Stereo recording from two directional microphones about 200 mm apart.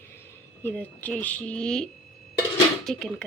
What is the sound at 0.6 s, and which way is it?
A woman's voice, 10° left (ahead or behind).